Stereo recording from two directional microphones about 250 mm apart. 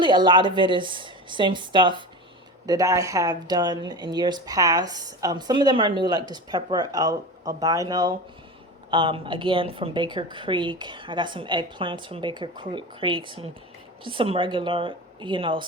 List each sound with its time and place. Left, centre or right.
0.0 s a woman's voice: centre